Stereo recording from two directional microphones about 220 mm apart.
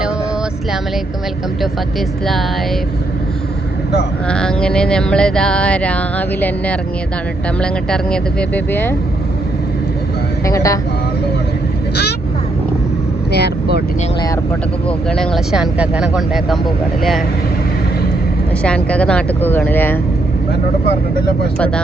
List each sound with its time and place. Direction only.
4.3 s music: 5° left (ahead or behind)
7.6 s speech: 5° left (ahead or behind)
10.4 s speech: 15° left (ahead or behind)
13.3 s speech: 50° left (ahead or behind)
14.8 s music: centre (ahead or behind)
18.6 s speech: 5° left (ahead or behind)